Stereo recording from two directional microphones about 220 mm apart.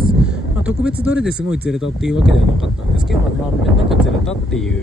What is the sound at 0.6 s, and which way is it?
Speech, 5° right (ahead or behind).